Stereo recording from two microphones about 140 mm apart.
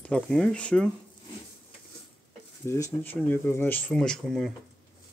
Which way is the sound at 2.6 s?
20° left (ahead or behind).